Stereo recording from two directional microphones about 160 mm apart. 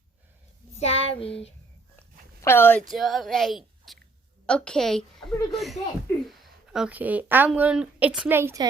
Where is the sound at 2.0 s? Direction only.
15° left (ahead or behind).